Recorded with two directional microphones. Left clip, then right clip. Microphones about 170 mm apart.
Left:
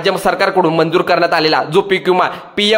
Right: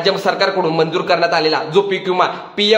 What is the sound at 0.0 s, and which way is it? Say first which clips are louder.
A man's voice: left 2 dB; 45° left (ahead or behind).